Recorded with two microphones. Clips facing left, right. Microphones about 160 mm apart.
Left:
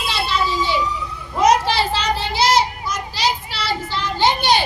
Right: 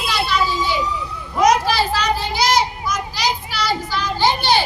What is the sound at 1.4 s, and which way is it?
Children playing, 30° left (ahead or behind).